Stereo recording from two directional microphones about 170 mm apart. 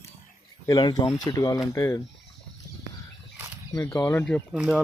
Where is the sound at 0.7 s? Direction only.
25° left (ahead or behind).